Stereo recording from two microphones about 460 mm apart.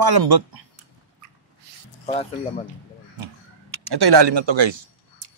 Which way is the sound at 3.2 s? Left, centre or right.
Right.